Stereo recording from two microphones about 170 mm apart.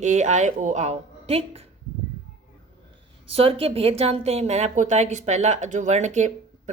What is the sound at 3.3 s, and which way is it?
A woman's voice, 35° right (ahead or behind).